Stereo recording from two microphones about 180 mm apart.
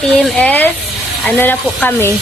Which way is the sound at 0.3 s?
10° left (ahead or behind).